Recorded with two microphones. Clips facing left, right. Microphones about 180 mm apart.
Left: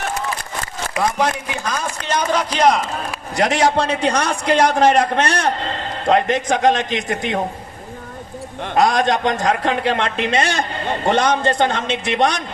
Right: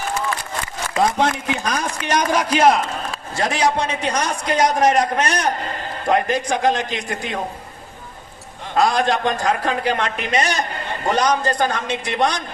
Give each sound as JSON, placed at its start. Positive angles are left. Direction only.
{"t": 1.0, "sound": "a man's voice", "side_deg": -25}
{"t": 2.0, "sound": "a man's voice", "side_deg": -10}
{"t": 3.1, "sound": "a man's voice", "side_deg": 20}
{"t": 8.7, "sound": "a man's voice", "side_deg": 20}